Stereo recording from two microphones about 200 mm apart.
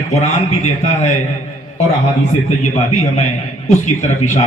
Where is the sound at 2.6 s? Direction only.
35° left (ahead or behind).